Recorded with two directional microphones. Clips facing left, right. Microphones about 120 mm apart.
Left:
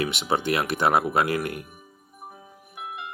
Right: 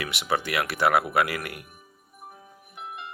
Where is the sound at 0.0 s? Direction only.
25° left (ahead or behind).